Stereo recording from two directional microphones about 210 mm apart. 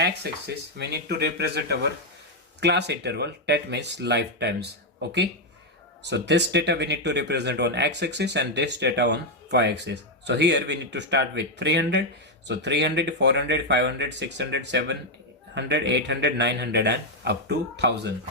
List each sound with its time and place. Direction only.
0.0 s speech: 50° right (ahead or behind)
6.0 s speech: 55° right (ahead or behind)